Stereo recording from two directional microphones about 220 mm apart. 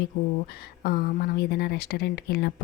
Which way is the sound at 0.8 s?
45° left (ahead or behind).